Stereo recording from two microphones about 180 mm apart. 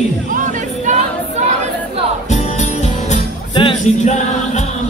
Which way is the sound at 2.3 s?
40° left (ahead or behind).